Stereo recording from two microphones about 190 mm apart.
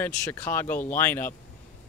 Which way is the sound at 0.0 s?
10° left (ahead or behind).